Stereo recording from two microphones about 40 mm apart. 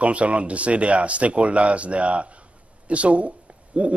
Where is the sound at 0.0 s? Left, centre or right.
Right.